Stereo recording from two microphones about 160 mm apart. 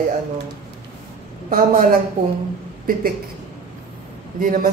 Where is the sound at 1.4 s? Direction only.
60° right (ahead or behind).